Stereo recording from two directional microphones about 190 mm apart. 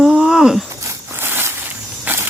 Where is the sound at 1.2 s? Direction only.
10° right (ahead or behind).